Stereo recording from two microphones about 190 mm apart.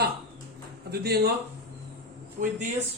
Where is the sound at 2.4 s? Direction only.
50° right (ahead or behind).